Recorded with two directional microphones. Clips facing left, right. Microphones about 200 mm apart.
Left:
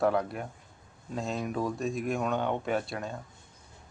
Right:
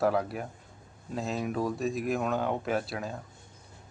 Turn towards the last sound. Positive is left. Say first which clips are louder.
# even
turn(degrees=0)  # may be behind; listen again after turning